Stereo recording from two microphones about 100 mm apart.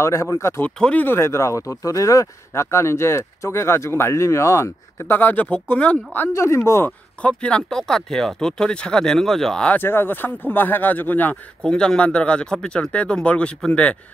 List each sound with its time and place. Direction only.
0.0 s speech: 30° left (ahead or behind)
0.7 s speech: 10° left (ahead or behind)
1.0 s speech: 25° left (ahead or behind)
6.2 s speech: 30° left (ahead or behind)
7.2 s speech: 10° left (ahead or behind)
9.8 s speech: 20° left (ahead or behind)
11.6 s speech: 10° left (ahead or behind)